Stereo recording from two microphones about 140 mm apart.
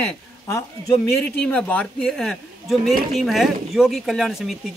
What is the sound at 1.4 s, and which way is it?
A man's voice, 10° left (ahead or behind).